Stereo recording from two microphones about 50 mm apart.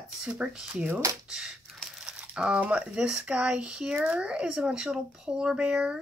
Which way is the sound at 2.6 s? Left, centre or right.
Right.